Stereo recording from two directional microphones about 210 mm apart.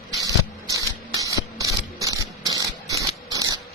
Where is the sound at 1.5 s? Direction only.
15° right (ahead or behind).